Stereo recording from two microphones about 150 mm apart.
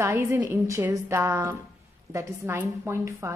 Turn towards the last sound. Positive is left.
turn(degrees=-20)  # may be behind; listen again after turning